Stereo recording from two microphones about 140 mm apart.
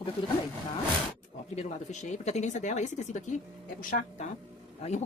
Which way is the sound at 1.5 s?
55° left (ahead or behind).